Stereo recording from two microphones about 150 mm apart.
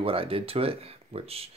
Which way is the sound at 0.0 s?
40° right (ahead or behind).